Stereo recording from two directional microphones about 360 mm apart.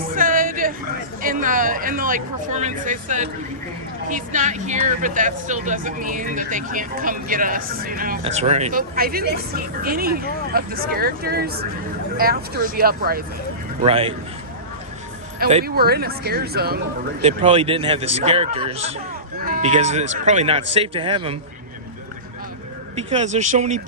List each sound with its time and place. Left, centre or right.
0.0 s a sound: right
1.2 s speech: right
15.4 s speech: right
23.0 s speech: centre